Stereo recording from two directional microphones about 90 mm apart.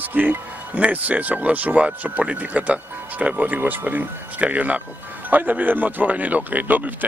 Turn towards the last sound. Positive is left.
turn(degrees=-20)  # may be behind; listen again after turning